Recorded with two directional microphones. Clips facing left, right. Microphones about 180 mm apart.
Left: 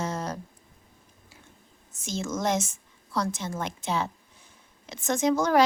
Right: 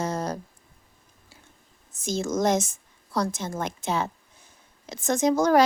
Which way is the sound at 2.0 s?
40° right (ahead or behind).